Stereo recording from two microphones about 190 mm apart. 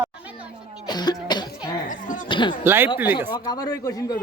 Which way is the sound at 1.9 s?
45° left (ahead or behind).